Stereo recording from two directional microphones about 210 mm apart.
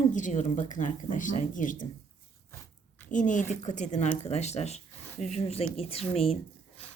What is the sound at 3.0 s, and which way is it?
Speech, 35° left (ahead or behind).